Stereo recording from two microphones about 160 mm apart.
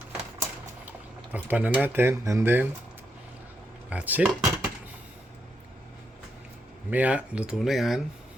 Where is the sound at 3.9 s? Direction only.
10° right (ahead or behind).